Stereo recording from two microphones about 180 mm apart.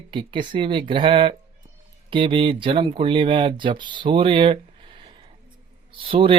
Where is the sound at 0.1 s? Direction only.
25° right (ahead or behind).